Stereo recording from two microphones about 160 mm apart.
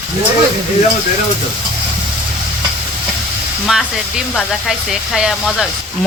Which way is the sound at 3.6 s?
5° right (ahead or behind).